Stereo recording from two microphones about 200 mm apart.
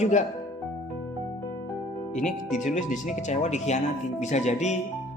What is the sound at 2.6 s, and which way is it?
Speech, 40° left (ahead or behind).